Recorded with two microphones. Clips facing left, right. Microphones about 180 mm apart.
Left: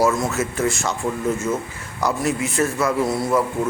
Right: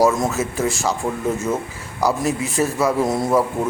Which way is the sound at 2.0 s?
35° right (ahead or behind).